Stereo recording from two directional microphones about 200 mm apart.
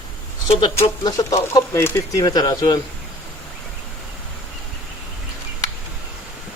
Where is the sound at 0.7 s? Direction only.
15° left (ahead or behind).